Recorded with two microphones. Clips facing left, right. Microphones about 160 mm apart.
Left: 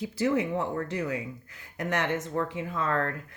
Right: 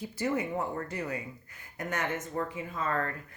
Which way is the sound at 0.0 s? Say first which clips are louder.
Left 5 dB; 75° left (ahead or behind).